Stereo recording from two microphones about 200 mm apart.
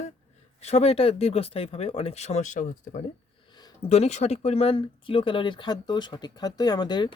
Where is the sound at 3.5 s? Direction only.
25° left (ahead or behind).